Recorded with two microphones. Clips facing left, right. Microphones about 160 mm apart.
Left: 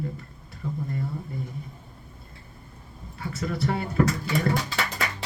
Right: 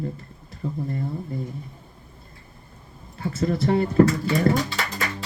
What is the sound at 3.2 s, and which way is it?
Speech, 35° right (ahead or behind).